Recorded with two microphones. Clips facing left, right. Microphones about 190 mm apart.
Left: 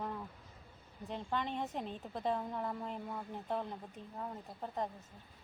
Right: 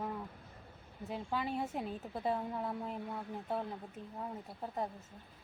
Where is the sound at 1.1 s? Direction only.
5° right (ahead or behind).